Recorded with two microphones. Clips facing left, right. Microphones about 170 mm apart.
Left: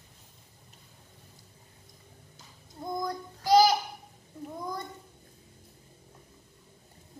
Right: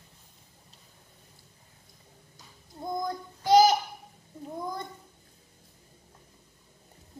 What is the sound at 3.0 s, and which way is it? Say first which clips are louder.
Child singing: right 1 dB; 25° right (ahead or behind).